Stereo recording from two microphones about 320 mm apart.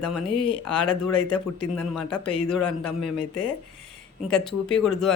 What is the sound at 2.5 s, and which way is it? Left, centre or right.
Speech, centre.